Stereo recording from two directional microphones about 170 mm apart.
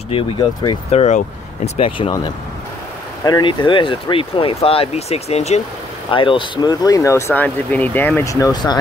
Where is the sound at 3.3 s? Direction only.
25° left (ahead or behind).